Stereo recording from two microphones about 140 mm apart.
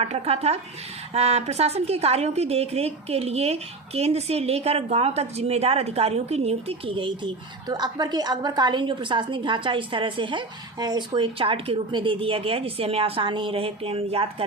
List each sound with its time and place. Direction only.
0.0 s a woman's voice: 50° right (ahead or behind)